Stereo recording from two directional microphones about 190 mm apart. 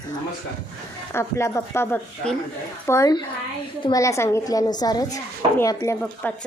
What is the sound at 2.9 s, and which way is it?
A woman's voice, 20° left (ahead or behind).